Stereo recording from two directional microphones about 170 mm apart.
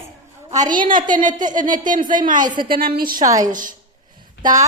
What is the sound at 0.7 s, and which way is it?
Speech, 55° right (ahead or behind).